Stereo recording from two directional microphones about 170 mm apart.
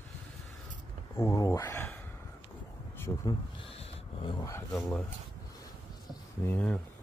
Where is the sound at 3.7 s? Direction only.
30° left (ahead or behind).